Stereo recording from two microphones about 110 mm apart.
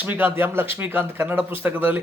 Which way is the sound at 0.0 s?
15° right (ahead or behind).